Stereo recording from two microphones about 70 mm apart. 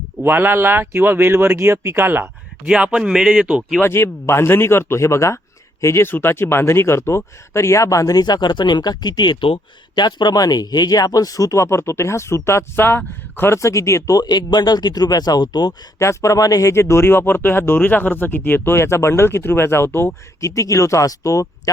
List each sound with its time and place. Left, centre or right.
0.2 s speech: right
2.6 s speech: centre
3.8 s speech: left
13.6 s speech: left
14.2 s speech: left
16.0 s speech: left
16.9 s speech: left
20.4 s speech: left